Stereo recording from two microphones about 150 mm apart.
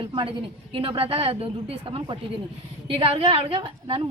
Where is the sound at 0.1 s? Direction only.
35° right (ahead or behind).